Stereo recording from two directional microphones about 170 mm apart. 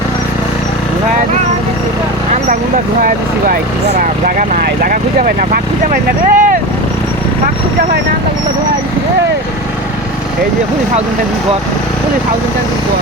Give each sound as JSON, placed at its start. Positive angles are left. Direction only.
{"t": 3.0, "sound": "speech", "side_deg": -60}